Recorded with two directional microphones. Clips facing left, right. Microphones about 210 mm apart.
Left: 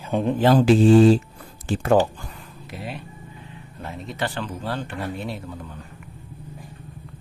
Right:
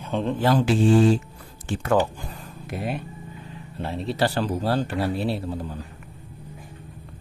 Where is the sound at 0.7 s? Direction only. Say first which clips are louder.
Left 5 dB; 90° left.